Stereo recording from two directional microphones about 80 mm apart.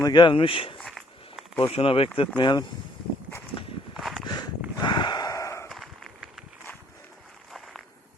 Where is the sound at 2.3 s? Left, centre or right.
Left.